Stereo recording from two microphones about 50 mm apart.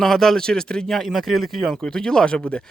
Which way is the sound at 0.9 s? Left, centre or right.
Centre.